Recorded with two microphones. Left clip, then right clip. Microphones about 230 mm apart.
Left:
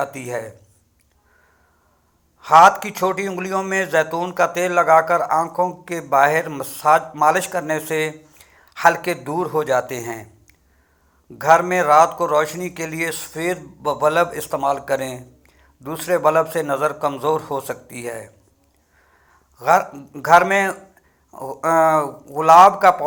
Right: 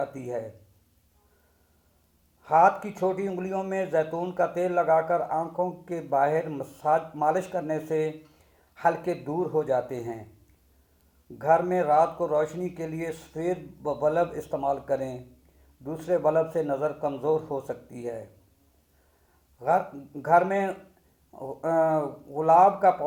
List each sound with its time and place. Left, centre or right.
0.0 s speech: centre
2.4 s a man's voice: centre
20.2 s a man's voice: centre
21.2 s speech: centre
21.6 s a man's voice: centre